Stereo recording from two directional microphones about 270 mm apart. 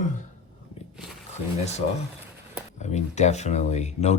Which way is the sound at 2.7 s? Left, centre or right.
Left.